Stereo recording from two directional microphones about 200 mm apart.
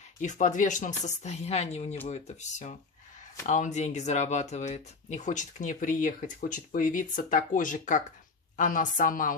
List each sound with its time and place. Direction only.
0.2 s speech: 40° left (ahead or behind)